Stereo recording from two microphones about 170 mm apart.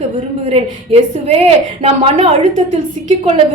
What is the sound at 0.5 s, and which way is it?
A woman's voice, 35° right (ahead or behind).